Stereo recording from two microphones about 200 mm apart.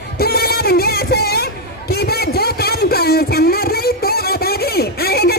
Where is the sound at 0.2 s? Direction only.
50° left (ahead or behind).